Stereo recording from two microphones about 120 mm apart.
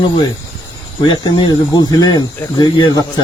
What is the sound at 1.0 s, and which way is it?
Speech, 40° left (ahead or behind).